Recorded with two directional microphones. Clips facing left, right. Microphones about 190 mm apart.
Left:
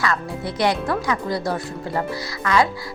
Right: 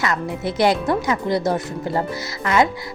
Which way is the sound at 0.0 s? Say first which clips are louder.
Right 2 dB; 25° right (ahead or behind).